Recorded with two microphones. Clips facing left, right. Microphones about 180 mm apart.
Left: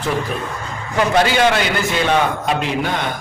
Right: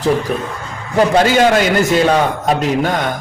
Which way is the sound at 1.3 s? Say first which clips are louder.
Right 4 dB; 45° right (ahead or behind).